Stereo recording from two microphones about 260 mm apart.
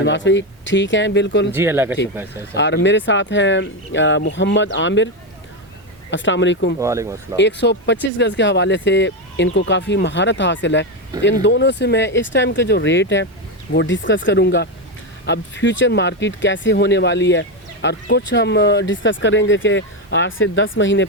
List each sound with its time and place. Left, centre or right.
0.0 s speech: left
1.5 s speech: centre
2.6 s speech: left
6.1 s speech: left
6.7 s speech: centre
7.3 s speech: left